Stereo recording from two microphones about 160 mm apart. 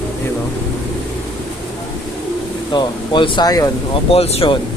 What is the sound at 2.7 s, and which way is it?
Speech, 30° left (ahead or behind).